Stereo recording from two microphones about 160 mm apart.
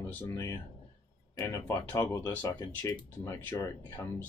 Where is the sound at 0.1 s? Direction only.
15° left (ahead or behind).